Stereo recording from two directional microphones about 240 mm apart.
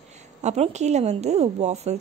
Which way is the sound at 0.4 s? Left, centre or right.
Right.